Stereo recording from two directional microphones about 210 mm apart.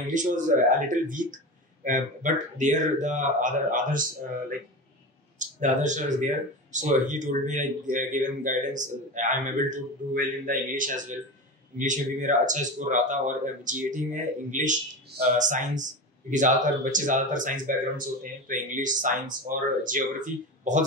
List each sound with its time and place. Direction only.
0.0 s speech: 35° right (ahead or behind)
5.4 s speech: 35° right (ahead or behind)